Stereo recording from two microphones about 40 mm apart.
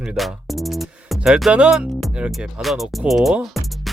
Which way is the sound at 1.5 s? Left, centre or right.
Right.